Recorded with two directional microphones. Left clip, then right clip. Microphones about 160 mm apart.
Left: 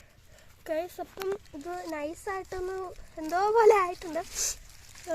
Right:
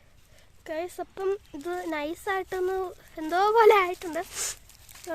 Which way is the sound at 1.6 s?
30° right (ahead or behind).